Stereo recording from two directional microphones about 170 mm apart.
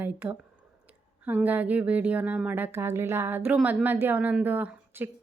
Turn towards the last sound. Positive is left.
turn(degrees=-10)  # may be behind; listen again after turning